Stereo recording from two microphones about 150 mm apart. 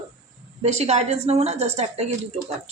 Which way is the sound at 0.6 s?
45° right (ahead or behind).